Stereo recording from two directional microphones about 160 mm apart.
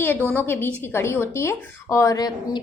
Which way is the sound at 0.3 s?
15° left (ahead or behind).